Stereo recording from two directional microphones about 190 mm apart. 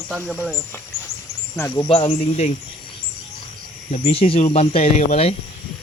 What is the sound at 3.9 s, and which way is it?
Speech, 35° left (ahead or behind).